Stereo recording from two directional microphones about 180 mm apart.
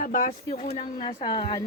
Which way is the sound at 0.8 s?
30° left (ahead or behind).